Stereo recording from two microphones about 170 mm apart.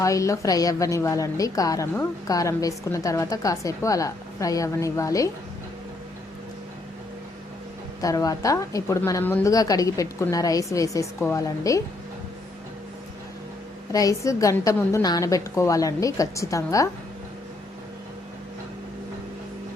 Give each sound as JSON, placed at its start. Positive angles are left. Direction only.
{"t": 0.0, "sound": "a woman's voice", "side_deg": 20}
{"t": 8.0, "sound": "a woman's voice", "side_deg": 20}
{"t": 13.9, "sound": "a woman's voice", "side_deg": 20}